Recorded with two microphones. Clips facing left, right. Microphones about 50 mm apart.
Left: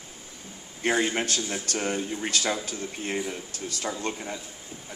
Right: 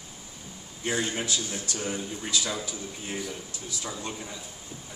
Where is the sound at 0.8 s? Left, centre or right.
Left.